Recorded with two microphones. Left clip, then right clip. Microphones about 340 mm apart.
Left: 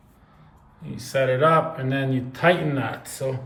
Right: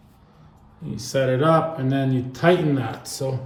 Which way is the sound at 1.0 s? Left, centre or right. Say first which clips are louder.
Left 1 dB; centre.